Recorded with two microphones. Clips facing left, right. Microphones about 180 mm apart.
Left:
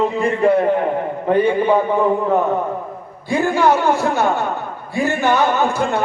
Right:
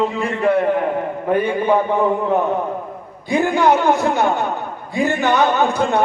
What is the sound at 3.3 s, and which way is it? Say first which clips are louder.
A man's voice: even; 20° right (ahead or behind).